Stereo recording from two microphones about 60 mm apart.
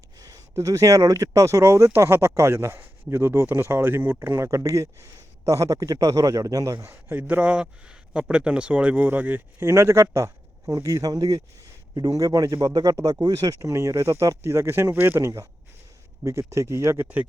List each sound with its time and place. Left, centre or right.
0.2 s a sound: right
0.5 s speech: right
4.4 s a man's voice: right
6.7 s speech: right
9.6 s speech: right
10.8 s a man's voice: right
12.6 s speech: right
13.2 s a man's voice: right
13.6 s speech: right
15.2 s speech: right